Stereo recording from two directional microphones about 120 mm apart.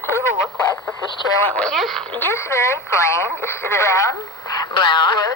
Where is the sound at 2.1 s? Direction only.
20° left (ahead or behind).